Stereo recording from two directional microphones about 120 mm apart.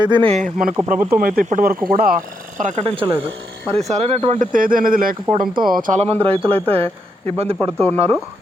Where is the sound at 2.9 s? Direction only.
45° right (ahead or behind).